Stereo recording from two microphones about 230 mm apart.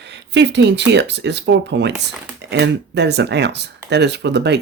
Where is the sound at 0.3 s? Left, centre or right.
Right.